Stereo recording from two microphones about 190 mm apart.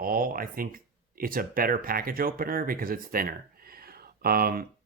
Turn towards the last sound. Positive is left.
turn(degrees=-50)  # may be behind; listen again after turning